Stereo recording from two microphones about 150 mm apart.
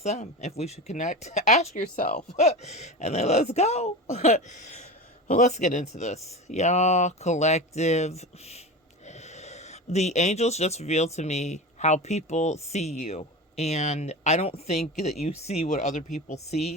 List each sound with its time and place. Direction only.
0.0 s speech: 45° left (ahead or behind)
1.7 s speech: 60° left (ahead or behind)